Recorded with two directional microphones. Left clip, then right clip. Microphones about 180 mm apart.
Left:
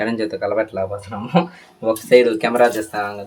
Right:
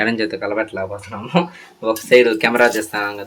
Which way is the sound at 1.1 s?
15° left (ahead or behind).